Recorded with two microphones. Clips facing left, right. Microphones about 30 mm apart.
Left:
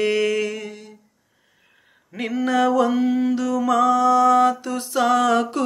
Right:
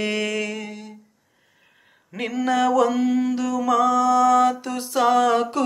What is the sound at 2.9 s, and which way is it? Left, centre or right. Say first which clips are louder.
Mantra: left 1 dB; right.